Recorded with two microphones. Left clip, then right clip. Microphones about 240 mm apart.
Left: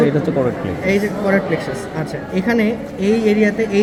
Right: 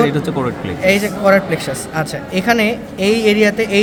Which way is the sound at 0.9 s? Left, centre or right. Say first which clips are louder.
Right 5 dB; right.